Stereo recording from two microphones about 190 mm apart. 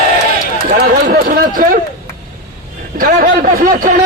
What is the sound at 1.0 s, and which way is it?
Speech, 45° right (ahead or behind).